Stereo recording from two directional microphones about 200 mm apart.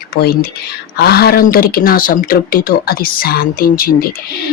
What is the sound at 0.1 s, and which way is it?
Speech, 50° left (ahead or behind).